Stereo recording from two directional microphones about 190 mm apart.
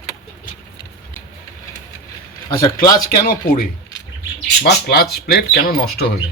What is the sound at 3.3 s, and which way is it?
Speech, 50° left (ahead or behind).